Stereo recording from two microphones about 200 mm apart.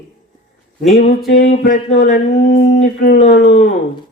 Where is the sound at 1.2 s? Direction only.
55° left (ahead or behind).